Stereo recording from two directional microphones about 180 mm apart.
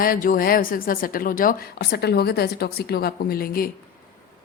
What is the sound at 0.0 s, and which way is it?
A woman's voice, 50° left (ahead or behind).